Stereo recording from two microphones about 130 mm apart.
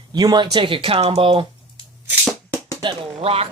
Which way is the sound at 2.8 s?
50° right (ahead or behind).